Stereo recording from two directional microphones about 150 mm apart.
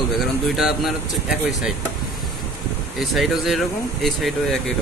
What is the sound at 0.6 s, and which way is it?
Speech, centre (ahead or behind).